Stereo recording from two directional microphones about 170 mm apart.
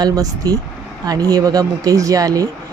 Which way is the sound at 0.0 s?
20° right (ahead or behind).